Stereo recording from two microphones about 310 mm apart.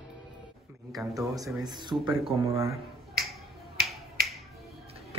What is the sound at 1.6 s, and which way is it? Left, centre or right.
Speech, centre.